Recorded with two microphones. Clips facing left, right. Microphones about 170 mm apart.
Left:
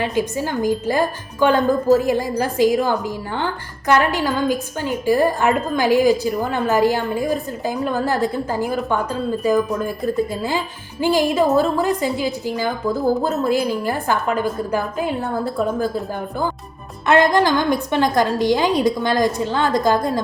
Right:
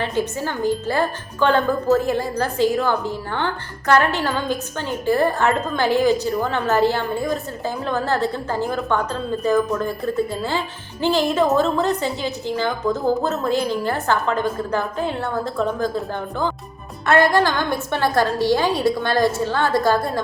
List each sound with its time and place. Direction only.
0.0 s a woman's voice: 15° left (ahead or behind)
17.1 s a woman's voice: 20° left (ahead or behind)